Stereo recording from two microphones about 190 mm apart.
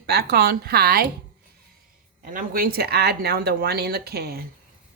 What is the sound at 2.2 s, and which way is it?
Speech, 50° right (ahead or behind).